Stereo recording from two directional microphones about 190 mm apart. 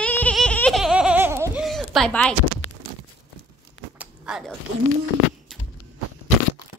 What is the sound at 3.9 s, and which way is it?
Biting, 5° right (ahead or behind).